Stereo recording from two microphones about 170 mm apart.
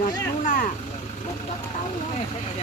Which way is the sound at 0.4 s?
55° left (ahead or behind).